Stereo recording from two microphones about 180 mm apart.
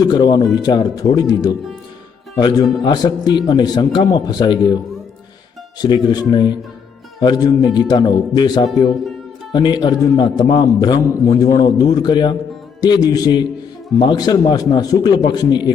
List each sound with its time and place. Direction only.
0.0 s a man's voice: 25° left (ahead or behind)
5.8 s a man's voice: 25° left (ahead or behind)